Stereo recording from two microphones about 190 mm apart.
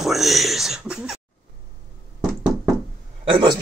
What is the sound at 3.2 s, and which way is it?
Speech, 25° right (ahead or behind).